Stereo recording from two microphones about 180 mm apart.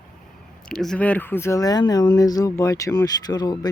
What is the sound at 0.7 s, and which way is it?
Speech, 5° left (ahead or behind).